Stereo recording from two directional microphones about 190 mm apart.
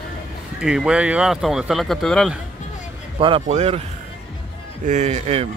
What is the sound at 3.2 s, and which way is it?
Speech, 30° right (ahead or behind).